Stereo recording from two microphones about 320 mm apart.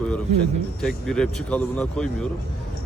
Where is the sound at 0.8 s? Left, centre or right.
Centre.